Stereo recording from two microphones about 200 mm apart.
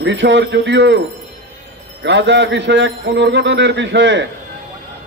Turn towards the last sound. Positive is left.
turn(degrees=-65)  # may be behind; listen again after turning